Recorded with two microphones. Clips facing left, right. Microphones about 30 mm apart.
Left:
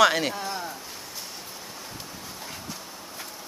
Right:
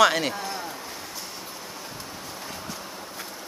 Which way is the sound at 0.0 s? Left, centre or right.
Centre.